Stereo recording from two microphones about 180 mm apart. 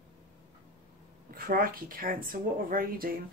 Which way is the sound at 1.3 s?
55° right (ahead or behind).